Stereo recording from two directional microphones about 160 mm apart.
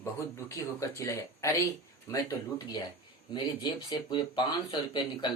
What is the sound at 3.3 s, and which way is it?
Speech, 30° left (ahead or behind).